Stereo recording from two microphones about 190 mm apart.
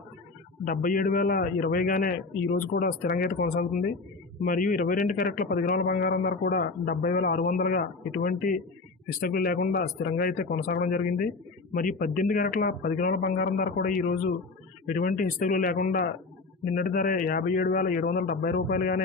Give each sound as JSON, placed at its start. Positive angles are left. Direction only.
{"t": 0.6, "sound": "a man's voice", "side_deg": 45}